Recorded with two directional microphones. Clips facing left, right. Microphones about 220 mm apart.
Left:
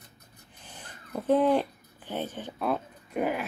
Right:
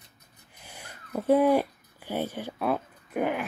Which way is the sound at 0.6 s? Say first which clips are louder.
Right 1 dB; 10° right (ahead or behind).